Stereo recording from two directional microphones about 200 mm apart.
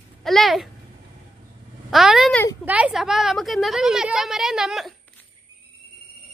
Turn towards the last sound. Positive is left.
turn(degrees=0)  # may be behind; listen again after turning